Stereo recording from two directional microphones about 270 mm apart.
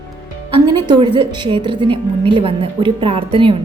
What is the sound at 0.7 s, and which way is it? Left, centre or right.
A woman's voice, centre.